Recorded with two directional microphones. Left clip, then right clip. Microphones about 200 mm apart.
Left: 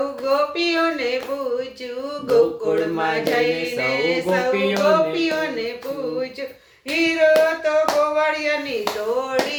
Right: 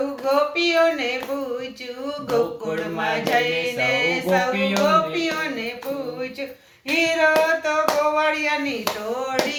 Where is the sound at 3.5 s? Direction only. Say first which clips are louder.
Even; 15° left (ahead or behind).